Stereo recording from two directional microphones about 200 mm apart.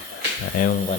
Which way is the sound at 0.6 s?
45° left (ahead or behind).